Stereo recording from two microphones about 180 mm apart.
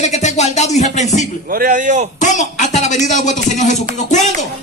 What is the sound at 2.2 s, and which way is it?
Speech, 45° left (ahead or behind).